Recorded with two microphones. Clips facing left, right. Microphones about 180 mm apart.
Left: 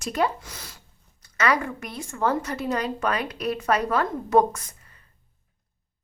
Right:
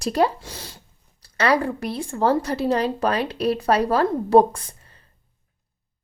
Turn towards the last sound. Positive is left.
turn(degrees=-30)  # may be behind; listen again after turning